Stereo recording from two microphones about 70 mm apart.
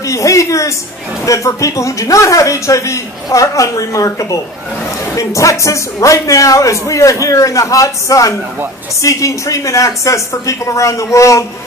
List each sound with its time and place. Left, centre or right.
0.0 s a woman's voice: left